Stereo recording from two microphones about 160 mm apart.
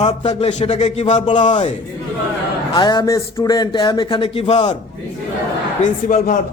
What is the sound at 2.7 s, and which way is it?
A man's voice, 25° left (ahead or behind).